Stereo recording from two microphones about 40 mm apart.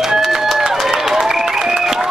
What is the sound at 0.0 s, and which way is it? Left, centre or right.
Run, centre.